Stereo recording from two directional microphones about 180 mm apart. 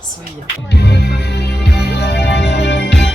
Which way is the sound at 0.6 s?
65° left (ahead or behind).